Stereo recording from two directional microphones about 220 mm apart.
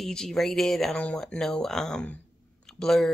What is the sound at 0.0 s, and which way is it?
Speech, 5° left (ahead or behind).